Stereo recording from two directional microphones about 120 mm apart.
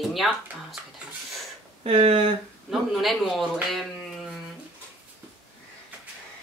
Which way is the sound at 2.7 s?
Centre (ahead or behind).